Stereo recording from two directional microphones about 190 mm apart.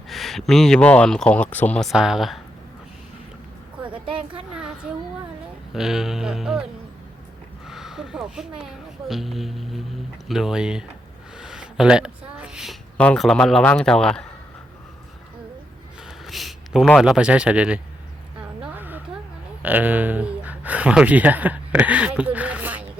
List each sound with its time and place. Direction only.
0.1 s speech: centre (ahead or behind)
3.8 s a sound: 25° right (ahead or behind)
5.7 s speech: centre (ahead or behind)
7.7 s speech: centre (ahead or behind)
16.0 s a man's voice: centre (ahead or behind)
18.6 s a sound: 10° right (ahead or behind)
19.6 s speech: 10° right (ahead or behind)